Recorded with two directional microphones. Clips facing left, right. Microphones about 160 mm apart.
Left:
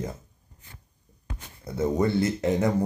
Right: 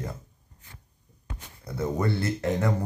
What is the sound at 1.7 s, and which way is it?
Speech, 20° left (ahead or behind).